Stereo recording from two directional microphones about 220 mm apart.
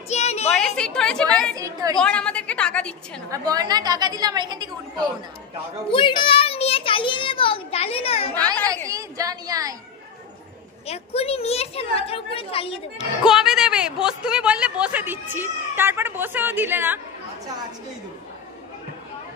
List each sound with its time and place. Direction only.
0.1 s a sound: 30° left (ahead or behind)
0.5 s a woman's voice: 5° left (ahead or behind)
1.5 s speech: 15° right (ahead or behind)
2.0 s a woman's voice: 5° left (ahead or behind)
3.3 s speech: 15° right (ahead or behind)
5.9 s a child's voice: 20° left (ahead or behind)
8.8 s speech: 15° right (ahead or behind)
10.9 s a child's voice: 25° left (ahead or behind)
13.2 s speech: centre (ahead or behind)